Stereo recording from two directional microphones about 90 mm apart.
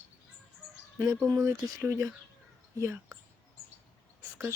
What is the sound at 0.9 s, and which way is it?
Speech, 30° right (ahead or behind).